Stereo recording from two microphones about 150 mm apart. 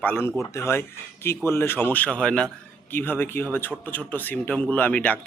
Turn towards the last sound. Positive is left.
turn(degrees=10)  # may be behind; listen again after turning